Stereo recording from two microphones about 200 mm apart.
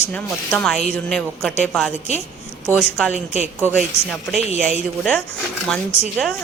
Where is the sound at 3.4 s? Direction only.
10° right (ahead or behind).